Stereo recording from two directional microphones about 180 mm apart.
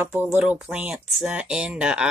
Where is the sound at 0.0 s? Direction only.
10° right (ahead or behind).